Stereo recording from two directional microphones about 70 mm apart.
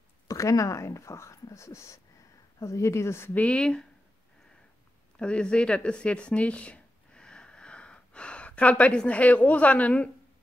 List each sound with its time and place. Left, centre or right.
0.3 s speech: left
3.3 s speech: centre
5.2 s speech: centre